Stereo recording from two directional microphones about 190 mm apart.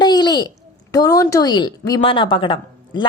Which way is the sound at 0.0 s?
20° left (ahead or behind).